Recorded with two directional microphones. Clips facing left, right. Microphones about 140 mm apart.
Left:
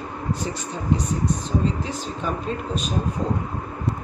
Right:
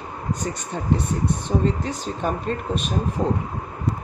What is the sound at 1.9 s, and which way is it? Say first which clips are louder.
Speech: right 2 dB; 50° right (ahead or behind).